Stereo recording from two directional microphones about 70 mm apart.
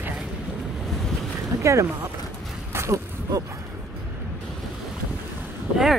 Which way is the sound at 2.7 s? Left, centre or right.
Right.